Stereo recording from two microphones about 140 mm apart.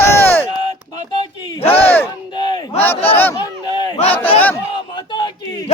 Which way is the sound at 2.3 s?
30° left (ahead or behind).